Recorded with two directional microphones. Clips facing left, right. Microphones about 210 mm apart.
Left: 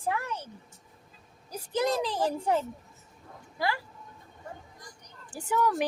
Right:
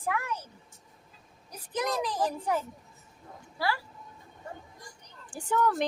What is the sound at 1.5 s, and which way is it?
A woman's voice, 30° left (ahead or behind).